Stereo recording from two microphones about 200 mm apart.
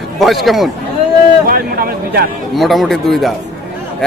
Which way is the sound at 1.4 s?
45° right (ahead or behind).